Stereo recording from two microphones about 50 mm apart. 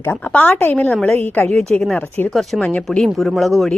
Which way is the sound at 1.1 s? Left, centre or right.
Left.